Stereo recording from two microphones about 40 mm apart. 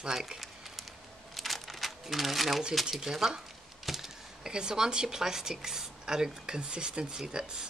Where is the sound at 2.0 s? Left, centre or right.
Centre.